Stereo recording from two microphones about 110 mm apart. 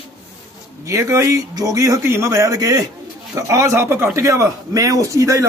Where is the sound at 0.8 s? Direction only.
25° right (ahead or behind).